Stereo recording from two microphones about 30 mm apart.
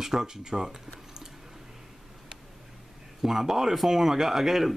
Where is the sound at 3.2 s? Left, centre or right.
Centre.